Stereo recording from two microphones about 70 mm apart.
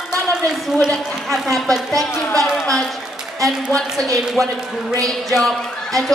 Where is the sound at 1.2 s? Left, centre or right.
Centre.